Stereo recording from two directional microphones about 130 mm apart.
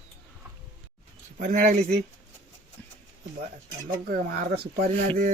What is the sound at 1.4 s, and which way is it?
Speech, 80° right.